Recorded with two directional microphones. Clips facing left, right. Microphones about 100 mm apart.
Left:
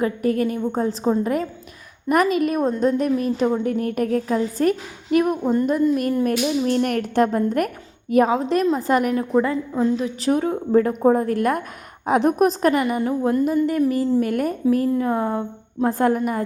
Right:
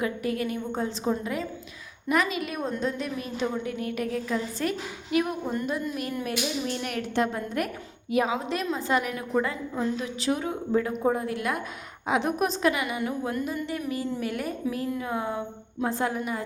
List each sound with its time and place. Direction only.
0.0 s a woman's voice: 40° left (ahead or behind)
9.4 s a woman's voice: 35° left (ahead or behind)